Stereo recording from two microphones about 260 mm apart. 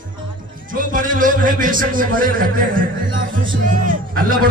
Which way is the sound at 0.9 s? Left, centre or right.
Right.